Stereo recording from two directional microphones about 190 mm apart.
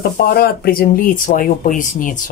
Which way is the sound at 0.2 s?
50° left (ahead or behind).